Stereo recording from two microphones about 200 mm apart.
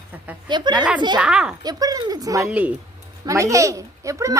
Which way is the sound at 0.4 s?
20° right (ahead or behind).